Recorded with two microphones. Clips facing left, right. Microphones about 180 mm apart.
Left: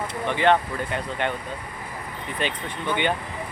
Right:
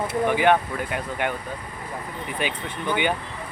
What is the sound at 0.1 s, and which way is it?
Speech, 10° right (ahead or behind).